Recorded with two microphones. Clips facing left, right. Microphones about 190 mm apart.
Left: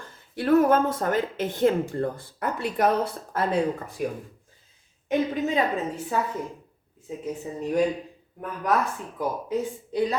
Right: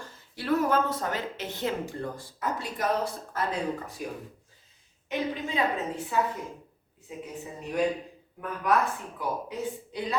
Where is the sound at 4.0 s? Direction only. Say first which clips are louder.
Left 7 dB; 60° left (ahead or behind).